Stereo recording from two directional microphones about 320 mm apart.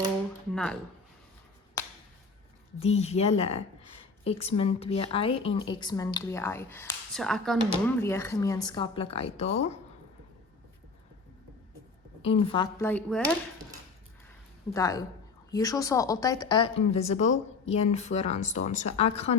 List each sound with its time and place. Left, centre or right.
0.5 s speech: centre
2.8 s speech: centre
12.2 s speech: centre
14.7 s speech: centre